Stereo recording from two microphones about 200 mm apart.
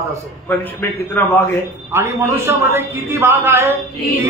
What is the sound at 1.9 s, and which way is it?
A man's voice, 15° right (ahead or behind).